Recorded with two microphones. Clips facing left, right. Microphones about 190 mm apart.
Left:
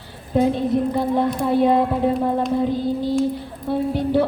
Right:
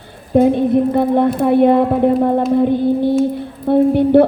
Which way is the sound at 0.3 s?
55° right (ahead or behind).